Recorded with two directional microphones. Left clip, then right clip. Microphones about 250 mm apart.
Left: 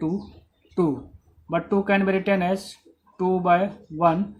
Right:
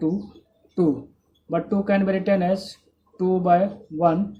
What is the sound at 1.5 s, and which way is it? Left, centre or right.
Speech, centre.